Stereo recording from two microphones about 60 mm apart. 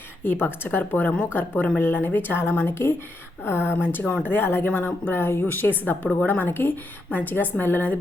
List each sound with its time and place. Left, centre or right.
0.3 s speech: left